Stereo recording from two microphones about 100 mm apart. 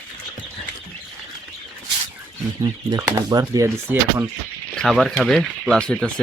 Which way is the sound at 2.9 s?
35° right (ahead or behind).